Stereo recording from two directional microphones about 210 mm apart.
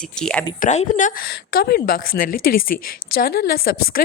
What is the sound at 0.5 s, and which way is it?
A woman's voice, 35° left (ahead or behind).